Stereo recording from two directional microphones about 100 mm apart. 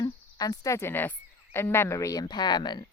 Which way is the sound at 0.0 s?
40° left (ahead or behind).